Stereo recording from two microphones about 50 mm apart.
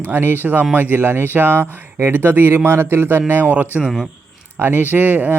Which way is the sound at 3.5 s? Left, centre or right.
Right.